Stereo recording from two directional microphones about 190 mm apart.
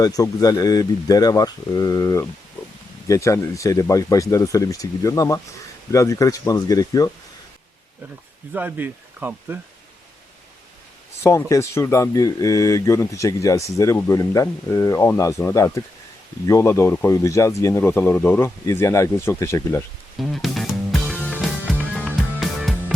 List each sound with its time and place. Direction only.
0.0 s speech: 20° left (ahead or behind)
8.5 s speech: 10° right (ahead or behind)
11.2 s speech: 15° left (ahead or behind)
20.1 s music: centre (ahead or behind)
21.9 s music: 5° left (ahead or behind)